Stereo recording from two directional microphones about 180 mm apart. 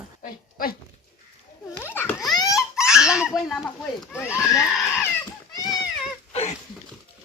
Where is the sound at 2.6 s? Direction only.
5° right (ahead or behind).